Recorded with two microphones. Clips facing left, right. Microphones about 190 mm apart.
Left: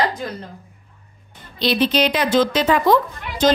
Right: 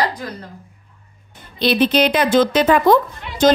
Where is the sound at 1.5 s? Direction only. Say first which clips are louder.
Right 3 dB; 55° right (ahead or behind).